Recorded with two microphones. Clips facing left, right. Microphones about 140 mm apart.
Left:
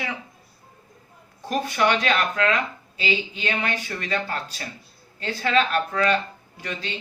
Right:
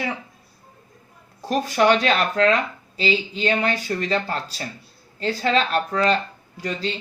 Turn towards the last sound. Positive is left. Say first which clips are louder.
# right 6 dB
turn(degrees=-35)  # may be behind; listen again after turning